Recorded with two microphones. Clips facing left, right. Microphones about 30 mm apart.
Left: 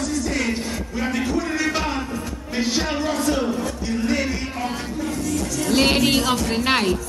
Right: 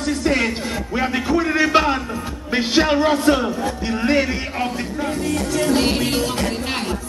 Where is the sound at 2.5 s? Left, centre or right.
Right.